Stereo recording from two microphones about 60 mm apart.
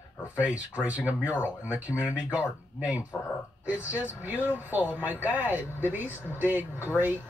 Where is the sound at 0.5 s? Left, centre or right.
Right.